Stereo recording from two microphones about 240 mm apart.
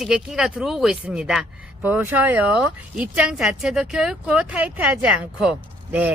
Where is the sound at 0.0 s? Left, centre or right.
Centre.